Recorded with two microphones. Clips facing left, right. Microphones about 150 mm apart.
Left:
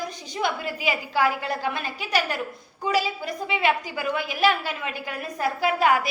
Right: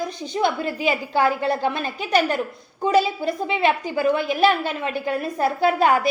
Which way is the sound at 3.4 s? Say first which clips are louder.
Right 1 dB; 30° right (ahead or behind).